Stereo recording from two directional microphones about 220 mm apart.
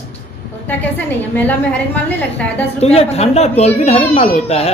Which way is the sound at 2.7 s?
30° left (ahead or behind).